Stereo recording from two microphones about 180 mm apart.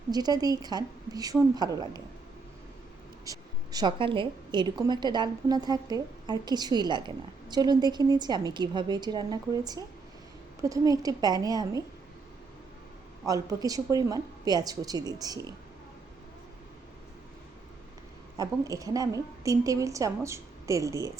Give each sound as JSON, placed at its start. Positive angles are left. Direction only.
{"t": 0.1, "sound": "a woman's voice", "side_deg": -20}
{"t": 3.2, "sound": "a woman's voice", "side_deg": -20}
{"t": 13.2, "sound": "a woman's voice", "side_deg": -20}
{"t": 18.3, "sound": "a woman's voice", "side_deg": -20}